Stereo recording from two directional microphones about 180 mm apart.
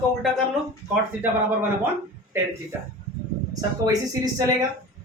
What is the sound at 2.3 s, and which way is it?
Speech, 15° right (ahead or behind).